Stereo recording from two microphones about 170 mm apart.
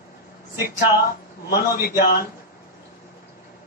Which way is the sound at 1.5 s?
65° left (ahead or behind).